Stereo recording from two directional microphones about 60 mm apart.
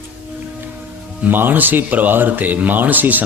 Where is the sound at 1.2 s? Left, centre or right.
Right.